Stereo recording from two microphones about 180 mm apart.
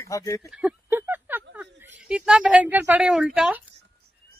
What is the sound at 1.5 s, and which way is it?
Speech, 10° right (ahead or behind).